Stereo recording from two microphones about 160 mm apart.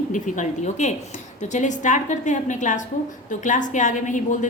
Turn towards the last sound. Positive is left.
turn(degrees=50)  # may be behind; listen again after turning